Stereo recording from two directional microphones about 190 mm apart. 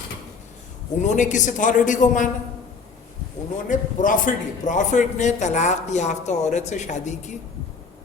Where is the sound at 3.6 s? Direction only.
45° left (ahead or behind).